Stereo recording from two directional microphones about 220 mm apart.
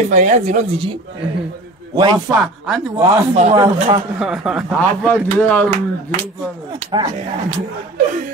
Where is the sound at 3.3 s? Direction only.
30° right (ahead or behind).